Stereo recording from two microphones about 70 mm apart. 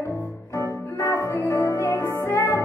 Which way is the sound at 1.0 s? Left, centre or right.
Left.